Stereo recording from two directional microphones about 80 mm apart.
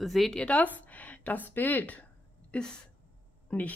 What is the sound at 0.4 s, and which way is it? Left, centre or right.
Speech, centre.